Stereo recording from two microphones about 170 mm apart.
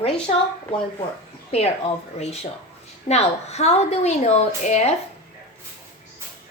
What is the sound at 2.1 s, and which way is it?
A woman's voice, 40° left (ahead or behind).